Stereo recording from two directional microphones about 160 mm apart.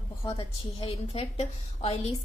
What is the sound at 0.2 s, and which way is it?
A woman's voice, 35° left (ahead or behind).